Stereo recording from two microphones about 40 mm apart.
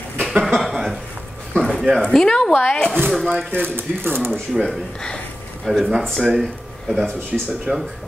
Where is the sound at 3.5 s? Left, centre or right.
Right.